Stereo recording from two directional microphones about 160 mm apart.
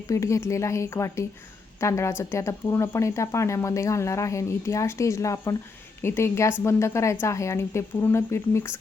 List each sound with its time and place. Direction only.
0.1 s speech: 20° left (ahead or behind)